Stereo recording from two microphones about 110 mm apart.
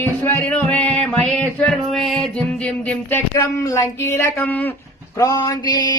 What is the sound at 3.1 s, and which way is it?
Speech, 20° left (ahead or behind).